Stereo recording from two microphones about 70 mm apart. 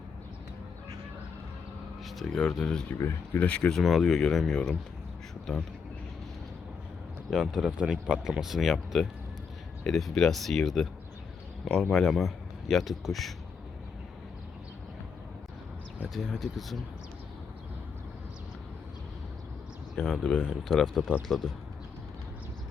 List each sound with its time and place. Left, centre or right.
2.0 s speech: centre
3.3 s speech: centre
3.8 s speech: centre
7.3 s speech: centre
16.1 s speech: centre
20.0 s speech: centre
20.2 s speech: centre
20.7 s speech: centre